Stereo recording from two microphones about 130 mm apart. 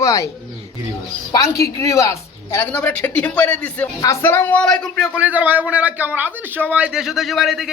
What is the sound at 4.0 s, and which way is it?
Speech, 20° left (ahead or behind).